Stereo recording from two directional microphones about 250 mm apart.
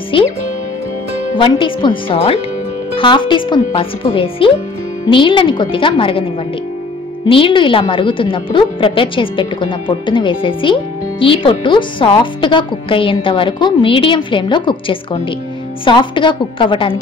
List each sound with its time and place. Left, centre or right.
0.1 s speech: left
1.3 s speech: centre
7.2 s speech: left